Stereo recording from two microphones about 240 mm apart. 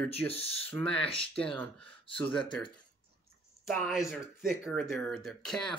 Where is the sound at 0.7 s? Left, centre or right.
Centre.